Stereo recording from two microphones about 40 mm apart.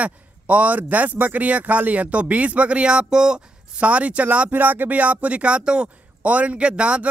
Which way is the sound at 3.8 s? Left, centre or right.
Right.